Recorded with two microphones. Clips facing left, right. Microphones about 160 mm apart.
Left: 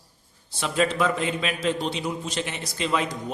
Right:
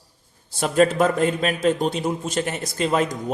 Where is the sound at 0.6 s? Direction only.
45° right (ahead or behind).